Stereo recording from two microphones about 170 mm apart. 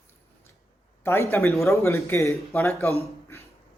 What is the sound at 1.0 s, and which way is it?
Speech, 15° left (ahead or behind).